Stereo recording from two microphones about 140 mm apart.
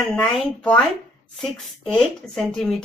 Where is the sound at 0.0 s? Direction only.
5° left (ahead or behind).